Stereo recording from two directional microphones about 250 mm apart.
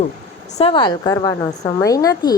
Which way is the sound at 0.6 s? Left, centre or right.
Centre.